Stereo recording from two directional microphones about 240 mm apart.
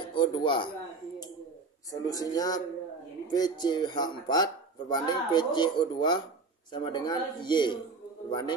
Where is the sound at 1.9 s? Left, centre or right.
Centre.